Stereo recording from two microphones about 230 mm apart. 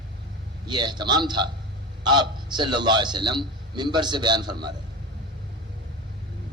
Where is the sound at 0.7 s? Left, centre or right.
Centre.